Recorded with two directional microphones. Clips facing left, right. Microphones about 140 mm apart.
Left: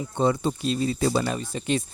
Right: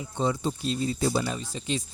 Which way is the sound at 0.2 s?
60° left (ahead or behind).